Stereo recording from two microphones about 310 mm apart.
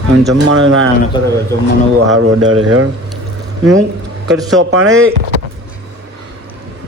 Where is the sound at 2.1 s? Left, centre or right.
Right.